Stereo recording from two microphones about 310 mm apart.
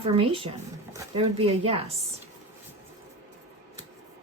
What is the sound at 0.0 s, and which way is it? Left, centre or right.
Speech, centre.